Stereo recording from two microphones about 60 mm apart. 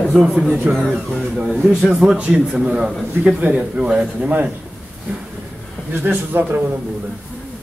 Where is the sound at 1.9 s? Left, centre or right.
Centre.